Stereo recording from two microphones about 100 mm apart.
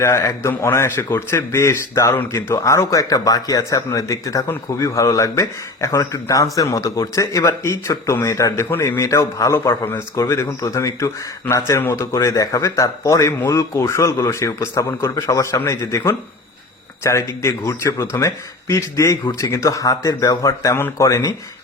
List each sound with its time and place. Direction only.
0.0 s a man's voice: 30° left (ahead or behind)